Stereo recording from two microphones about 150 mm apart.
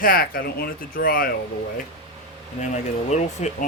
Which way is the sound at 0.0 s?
75° left (ahead or behind).